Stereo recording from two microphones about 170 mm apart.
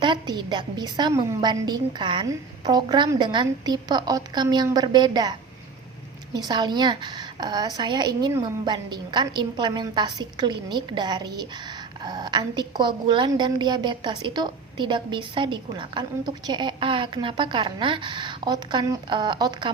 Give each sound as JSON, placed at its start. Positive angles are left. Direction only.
{"t": 0.0, "sound": "a woman's voice", "side_deg": -25}